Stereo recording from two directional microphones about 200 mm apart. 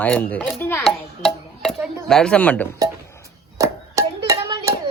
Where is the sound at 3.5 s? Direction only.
15° right (ahead or behind).